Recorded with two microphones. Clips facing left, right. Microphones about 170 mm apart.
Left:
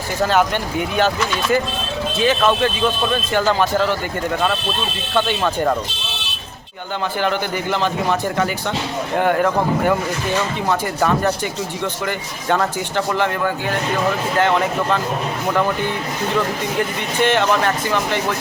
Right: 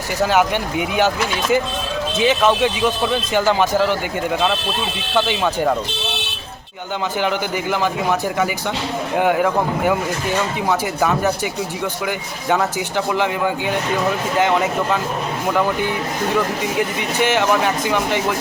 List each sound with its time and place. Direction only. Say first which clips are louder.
0.2 s speech: even; 10° right (ahead or behind)
5.1 s speech: even; 10° right (ahead or behind)
7.2 s speech: even; 15° right (ahead or behind)
9.1 s speech: even; 10° right (ahead or behind)
16.7 s speech: even; 10° right (ahead or behind)